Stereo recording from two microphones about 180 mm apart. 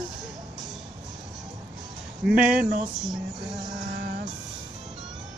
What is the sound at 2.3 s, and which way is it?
Speech, 5° right (ahead or behind).